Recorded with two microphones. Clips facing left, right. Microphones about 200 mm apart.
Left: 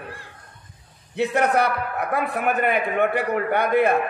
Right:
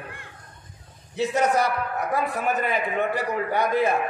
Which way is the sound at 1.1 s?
60° left (ahead or behind).